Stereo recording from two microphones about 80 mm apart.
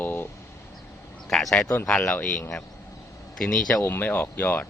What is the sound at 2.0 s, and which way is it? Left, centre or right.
Speech, left.